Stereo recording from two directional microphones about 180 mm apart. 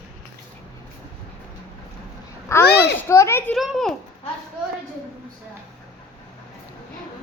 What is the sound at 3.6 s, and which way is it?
Speech, centre (ahead or behind).